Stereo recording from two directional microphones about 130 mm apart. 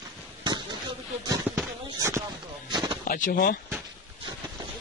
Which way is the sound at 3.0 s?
90° left.